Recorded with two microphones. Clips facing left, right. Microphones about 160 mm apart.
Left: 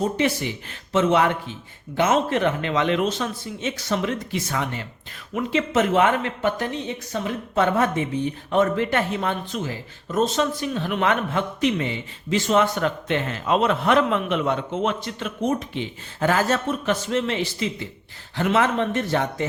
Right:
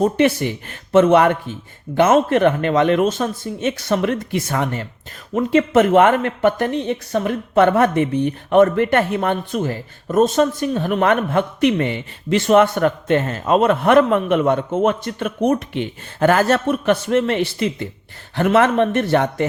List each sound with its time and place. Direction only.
0.0 s speech: 55° right (ahead or behind)